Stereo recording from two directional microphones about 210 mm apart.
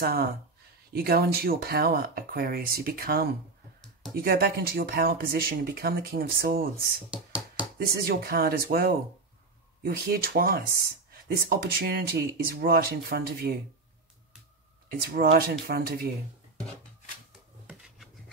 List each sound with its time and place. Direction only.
0.0 s speech: 45° right (ahead or behind)
7.1 s hands: 5° right (ahead or behind)
7.8 s speech: 45° right (ahead or behind)
14.9 s speech: 45° right (ahead or behind)
17.6 s rub: 5° right (ahead or behind)